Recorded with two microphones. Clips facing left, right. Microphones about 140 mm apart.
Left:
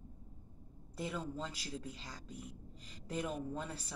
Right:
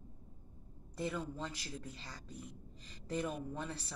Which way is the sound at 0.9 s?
10° left (ahead or behind).